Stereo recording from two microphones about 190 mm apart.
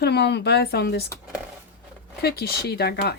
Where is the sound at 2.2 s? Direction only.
55° left (ahead or behind).